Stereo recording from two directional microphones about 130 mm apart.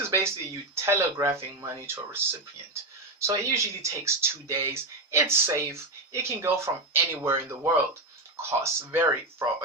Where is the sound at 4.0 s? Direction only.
20° right (ahead or behind).